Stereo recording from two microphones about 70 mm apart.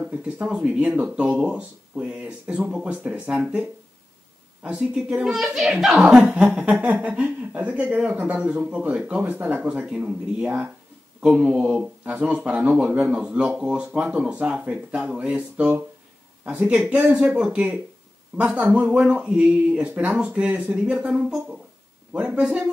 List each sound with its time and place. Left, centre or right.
0.0 s speech: centre
4.6 s a child's voice: centre
22.1 s speech: centre